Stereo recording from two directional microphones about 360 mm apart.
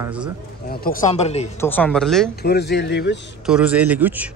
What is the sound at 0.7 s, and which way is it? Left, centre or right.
Speech, left.